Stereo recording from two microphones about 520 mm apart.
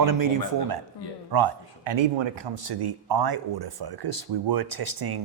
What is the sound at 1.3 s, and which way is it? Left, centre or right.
Speech, right.